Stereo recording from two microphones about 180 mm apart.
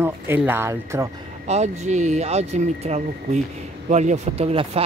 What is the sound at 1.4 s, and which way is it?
Speech, 40° right (ahead or behind).